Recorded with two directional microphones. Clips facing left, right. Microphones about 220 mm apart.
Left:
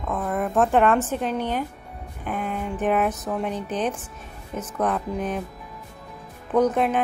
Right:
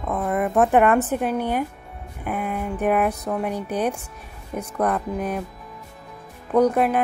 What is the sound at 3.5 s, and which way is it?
Speech, 10° right (ahead or behind).